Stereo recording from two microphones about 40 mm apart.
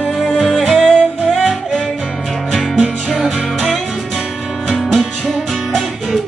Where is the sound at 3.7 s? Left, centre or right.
Centre.